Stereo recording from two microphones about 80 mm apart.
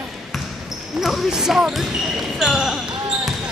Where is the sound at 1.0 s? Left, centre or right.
Centre.